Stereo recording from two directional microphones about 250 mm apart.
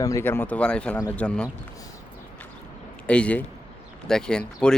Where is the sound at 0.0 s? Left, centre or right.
Centre.